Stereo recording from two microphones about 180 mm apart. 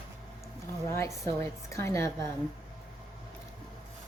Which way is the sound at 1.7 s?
15° left (ahead or behind).